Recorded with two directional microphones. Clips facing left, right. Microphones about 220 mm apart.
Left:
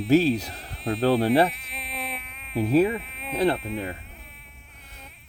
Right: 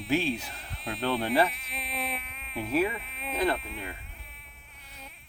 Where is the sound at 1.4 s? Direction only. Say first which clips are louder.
Left 5 dB; centre (ahead or behind).